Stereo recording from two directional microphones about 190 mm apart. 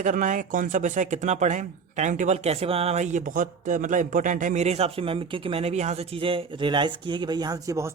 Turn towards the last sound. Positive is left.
turn(degrees=-20)  # may be behind; listen again after turning